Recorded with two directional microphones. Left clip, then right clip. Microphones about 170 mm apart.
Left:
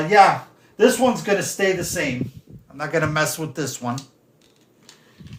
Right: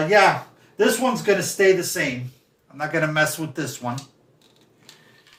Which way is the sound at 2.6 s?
50° left (ahead or behind).